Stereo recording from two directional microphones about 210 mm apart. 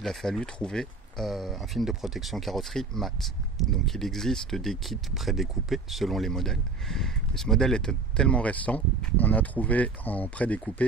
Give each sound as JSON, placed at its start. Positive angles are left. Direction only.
{"t": 0.0, "sound": "speech", "side_deg": 0}